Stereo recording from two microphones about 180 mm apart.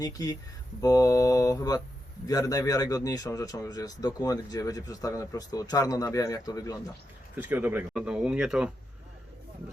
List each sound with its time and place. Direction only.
0.0 s a man's voice: 20° left (ahead or behind)
7.3 s speech: 10° right (ahead or behind)